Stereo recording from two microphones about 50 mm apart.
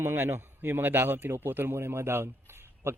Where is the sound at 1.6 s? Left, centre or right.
Right.